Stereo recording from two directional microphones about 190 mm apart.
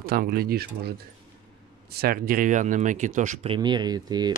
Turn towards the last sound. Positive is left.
turn(degrees=-20)  # may be behind; listen again after turning